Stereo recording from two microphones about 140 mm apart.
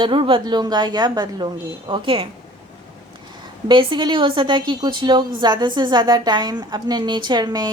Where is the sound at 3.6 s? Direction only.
35° right (ahead or behind).